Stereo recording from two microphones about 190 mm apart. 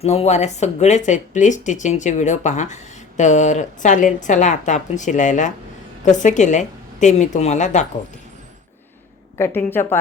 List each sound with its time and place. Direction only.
0.0 s speech: 35° left (ahead or behind)
9.4 s a woman's voice: 10° left (ahead or behind)